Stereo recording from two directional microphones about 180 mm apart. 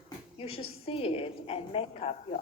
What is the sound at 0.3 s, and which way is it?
A woman's voice, 30° left (ahead or behind).